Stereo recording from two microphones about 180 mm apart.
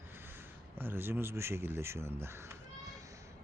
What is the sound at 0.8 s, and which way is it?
Speech, 10° right (ahead or behind).